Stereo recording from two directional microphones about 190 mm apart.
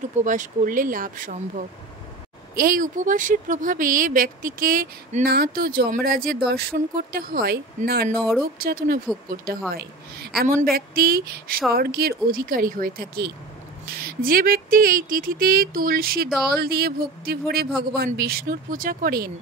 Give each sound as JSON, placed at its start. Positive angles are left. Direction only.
{"t": 0.2, "sound": "speech", "side_deg": -40}
{"t": 8.1, "sound": "speech", "side_deg": 5}
{"t": 8.5, "sound": "speech", "side_deg": -50}